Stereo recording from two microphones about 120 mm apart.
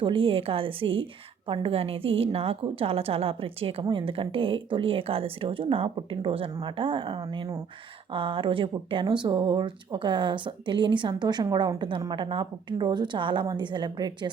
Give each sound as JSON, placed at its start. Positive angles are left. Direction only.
{"t": 0.0, "sound": "speech", "side_deg": -45}